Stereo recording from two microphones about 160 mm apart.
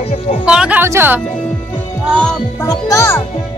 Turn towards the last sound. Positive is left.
turn(degrees=15)  # may be behind; listen again after turning